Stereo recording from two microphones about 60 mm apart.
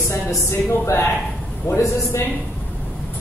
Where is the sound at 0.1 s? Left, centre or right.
Left.